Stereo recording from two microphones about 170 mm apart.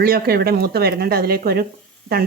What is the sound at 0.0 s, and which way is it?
Speech, 60° right (ahead or behind).